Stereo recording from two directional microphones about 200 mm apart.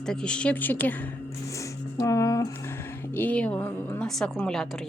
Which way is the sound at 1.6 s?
15° left (ahead or behind).